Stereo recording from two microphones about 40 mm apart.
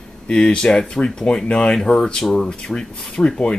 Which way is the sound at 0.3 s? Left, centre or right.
Left.